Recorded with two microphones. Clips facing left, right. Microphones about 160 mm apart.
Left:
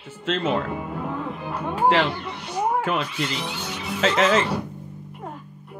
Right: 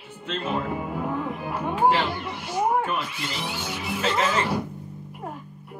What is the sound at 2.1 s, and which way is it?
Chatter, 5° right (ahead or behind).